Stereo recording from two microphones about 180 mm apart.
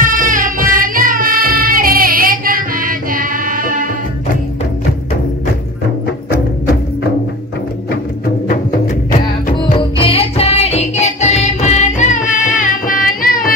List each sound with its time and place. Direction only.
0.0 s music: 50° right (ahead or behind)
8.5 s music: 50° left (ahead or behind)
9.8 s music: 30° left (ahead or behind); by 13.5 s 55° left (ahead or behind)